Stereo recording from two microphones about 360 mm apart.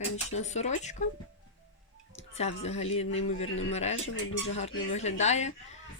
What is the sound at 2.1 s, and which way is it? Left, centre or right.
Speech, centre.